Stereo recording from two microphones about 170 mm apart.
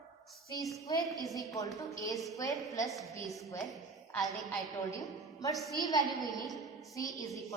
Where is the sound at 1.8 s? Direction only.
20° left (ahead or behind).